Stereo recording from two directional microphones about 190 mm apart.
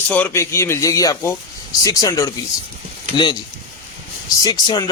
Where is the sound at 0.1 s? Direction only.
10° left (ahead or behind).